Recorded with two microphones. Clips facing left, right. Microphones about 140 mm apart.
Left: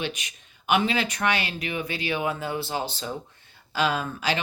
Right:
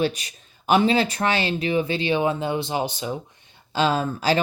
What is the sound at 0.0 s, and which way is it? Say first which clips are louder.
Speech: right 8 dB; 35° right (ahead or behind).